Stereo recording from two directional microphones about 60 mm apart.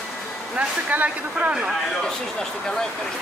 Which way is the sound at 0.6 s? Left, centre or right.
Right.